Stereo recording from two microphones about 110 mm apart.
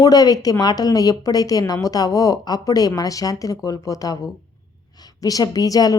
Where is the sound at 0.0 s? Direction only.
35° left (ahead or behind).